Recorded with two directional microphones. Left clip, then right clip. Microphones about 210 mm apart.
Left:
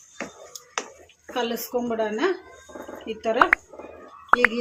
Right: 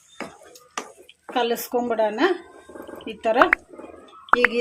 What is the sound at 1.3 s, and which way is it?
Speech, 55° right (ahead or behind).